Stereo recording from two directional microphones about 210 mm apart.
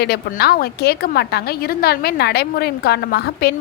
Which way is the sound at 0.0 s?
50° left (ahead or behind).